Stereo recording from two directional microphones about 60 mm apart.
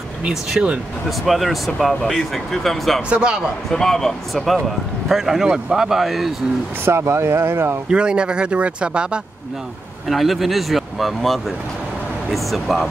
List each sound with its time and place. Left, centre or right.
0.3 s speech: centre
3.1 s speech: centre
3.7 s speech: centre
6.8 s speech: right
7.9 s speech: centre
10.0 s speech: centre